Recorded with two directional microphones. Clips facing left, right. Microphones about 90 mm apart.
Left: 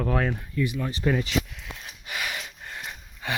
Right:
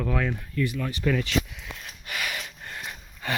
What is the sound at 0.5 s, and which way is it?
Speech, 15° left (ahead or behind).